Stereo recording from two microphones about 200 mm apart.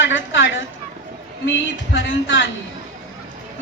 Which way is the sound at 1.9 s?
65° left (ahead or behind).